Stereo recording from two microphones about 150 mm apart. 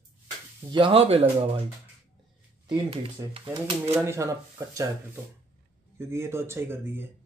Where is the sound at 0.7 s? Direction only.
35° right (ahead or behind).